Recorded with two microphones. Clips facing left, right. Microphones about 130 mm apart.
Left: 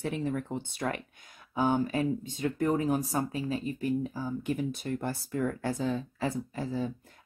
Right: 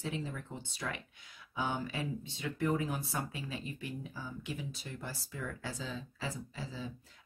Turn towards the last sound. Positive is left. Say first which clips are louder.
# left 10 dB
turn(degrees=50)  # may be behind; listen again after turning